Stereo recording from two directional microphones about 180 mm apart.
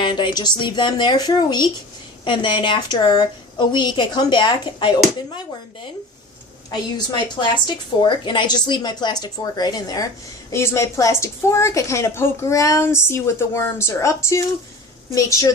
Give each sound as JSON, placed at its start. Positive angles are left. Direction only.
{"t": 0.0, "sound": "speech", "side_deg": 25}
{"t": 6.7, "sound": "a woman's voice", "side_deg": 25}